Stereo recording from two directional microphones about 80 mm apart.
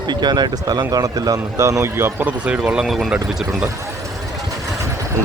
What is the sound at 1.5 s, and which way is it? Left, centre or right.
Speech, right.